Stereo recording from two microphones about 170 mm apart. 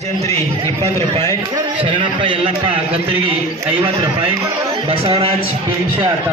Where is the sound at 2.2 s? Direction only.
30° right (ahead or behind).